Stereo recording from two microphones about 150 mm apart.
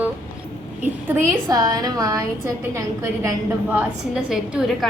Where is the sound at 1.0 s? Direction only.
20° right (ahead or behind).